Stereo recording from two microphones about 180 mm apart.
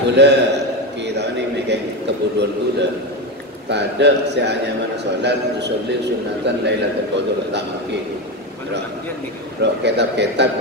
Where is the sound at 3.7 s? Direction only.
70° right (ahead or behind).